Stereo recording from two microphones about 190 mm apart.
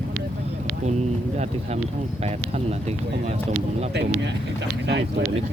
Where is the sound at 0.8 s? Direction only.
35° right (ahead or behind).